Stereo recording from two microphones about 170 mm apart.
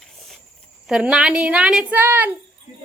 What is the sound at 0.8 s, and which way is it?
A woman's voice, 5° right (ahead or behind).